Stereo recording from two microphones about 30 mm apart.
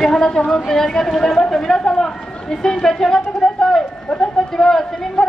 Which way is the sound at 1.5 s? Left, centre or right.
Centre.